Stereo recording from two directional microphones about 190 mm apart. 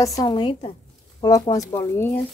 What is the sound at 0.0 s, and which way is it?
A woman's voice, 20° left (ahead or behind).